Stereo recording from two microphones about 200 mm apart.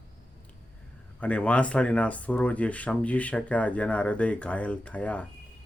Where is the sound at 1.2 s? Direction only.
5° left (ahead or behind).